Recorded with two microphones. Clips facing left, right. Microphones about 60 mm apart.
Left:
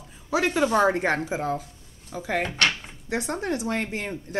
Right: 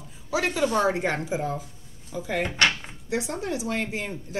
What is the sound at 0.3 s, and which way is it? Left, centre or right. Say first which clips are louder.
Speech: left 2 dB; left.